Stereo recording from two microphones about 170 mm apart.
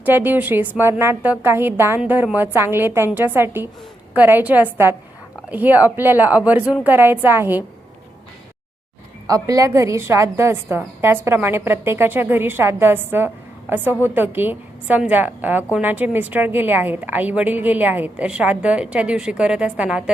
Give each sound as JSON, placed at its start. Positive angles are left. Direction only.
{"t": 0.0, "sound": "a woman's voice", "side_deg": -10}
{"t": 9.2, "sound": "a woman's voice", "side_deg": -20}